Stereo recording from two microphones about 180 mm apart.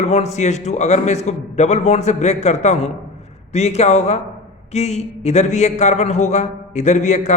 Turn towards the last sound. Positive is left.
turn(degrees=40)  # may be behind; listen again after turning